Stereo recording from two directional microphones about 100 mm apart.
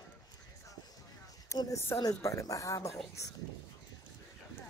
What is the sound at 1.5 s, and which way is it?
Speech, 35° left (ahead or behind).